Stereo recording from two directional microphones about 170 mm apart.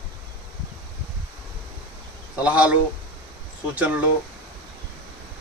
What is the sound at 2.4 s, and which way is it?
Speech, 5° right (ahead or behind).